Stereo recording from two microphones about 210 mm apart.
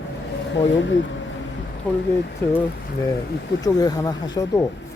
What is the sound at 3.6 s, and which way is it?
Speech, 15° left (ahead or behind).